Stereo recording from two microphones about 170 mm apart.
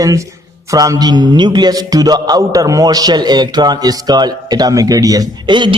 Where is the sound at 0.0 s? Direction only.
20° right (ahead or behind).